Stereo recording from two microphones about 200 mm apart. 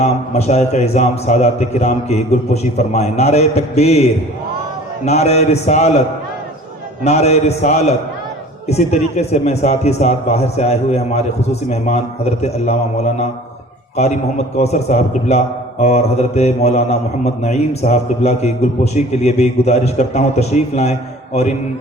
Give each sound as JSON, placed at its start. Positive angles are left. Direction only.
{"t": 0.0, "sound": "mantra", "side_deg": 35}
{"t": 7.0, "sound": "mantra", "side_deg": 35}